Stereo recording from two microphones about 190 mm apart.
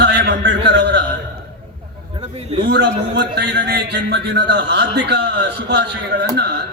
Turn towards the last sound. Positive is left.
turn(degrees=-60)  # may be behind; listen again after turning